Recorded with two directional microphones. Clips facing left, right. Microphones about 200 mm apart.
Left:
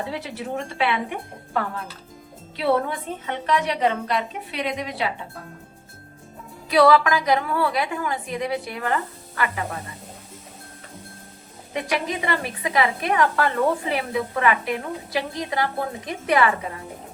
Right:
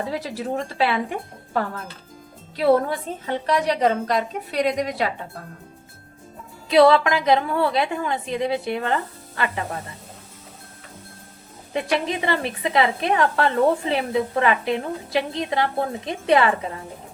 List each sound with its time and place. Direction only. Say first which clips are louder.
0.1 s a woman's voice: right 3 dB; 35° right (ahead or behind)
2.6 s a woman's voice: right 4 dB; 35° right (ahead or behind)
6.7 s a woman's voice: right 2 dB; 25° right (ahead or behind)
11.7 s a woman's voice: right 2 dB; 25° right (ahead or behind)